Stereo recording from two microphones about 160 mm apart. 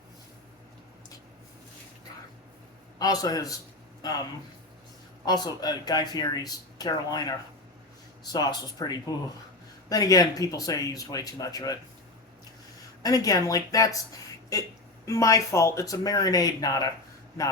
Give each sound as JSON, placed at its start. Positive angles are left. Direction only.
{"t": 3.0, "sound": "speech", "side_deg": 25}
{"t": 5.2, "sound": "speech", "side_deg": 25}
{"t": 13.0, "sound": "speech", "side_deg": 20}